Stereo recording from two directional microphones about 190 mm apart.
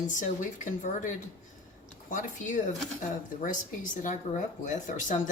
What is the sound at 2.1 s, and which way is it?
Speech, 45° left (ahead or behind).